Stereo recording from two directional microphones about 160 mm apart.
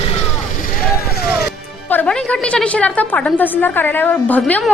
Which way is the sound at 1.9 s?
10° left (ahead or behind).